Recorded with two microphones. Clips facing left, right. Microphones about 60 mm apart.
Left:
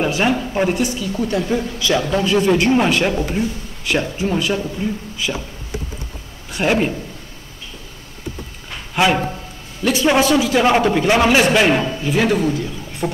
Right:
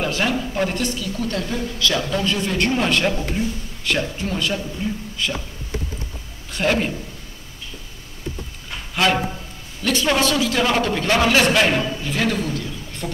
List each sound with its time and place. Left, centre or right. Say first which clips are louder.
0.0 s a woman's voice: left 4 dB; centre
4.8 s speech: left 3 dB; left
5.1 s speech: left 2 dB; centre
6.5 s a woman's voice: left 3 dB; centre
8.9 s a woman's voice: left 3 dB; centre